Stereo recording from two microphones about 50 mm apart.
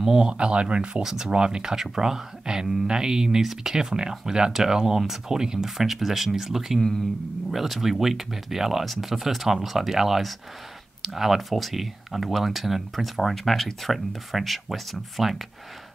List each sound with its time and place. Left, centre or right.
0.0 s speech: centre
1.0 s speech: centre